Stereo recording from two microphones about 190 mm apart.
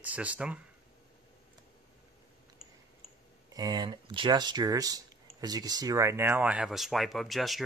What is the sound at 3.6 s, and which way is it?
Speech, 20° right (ahead or behind).